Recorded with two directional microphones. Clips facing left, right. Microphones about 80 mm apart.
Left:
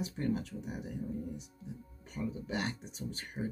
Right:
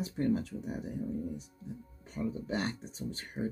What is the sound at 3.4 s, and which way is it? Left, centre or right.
Speech, centre.